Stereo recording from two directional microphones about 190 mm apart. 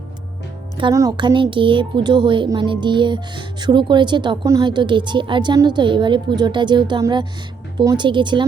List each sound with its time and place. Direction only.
0.8 s speech: 20° right (ahead or behind)